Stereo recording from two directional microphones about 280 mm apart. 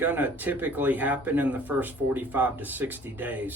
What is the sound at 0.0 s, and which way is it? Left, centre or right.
Speech, centre.